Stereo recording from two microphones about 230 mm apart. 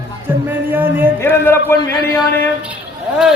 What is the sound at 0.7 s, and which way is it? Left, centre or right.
Speech, centre.